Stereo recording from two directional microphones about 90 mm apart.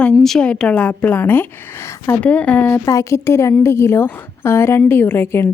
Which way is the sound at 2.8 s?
35° left (ahead or behind).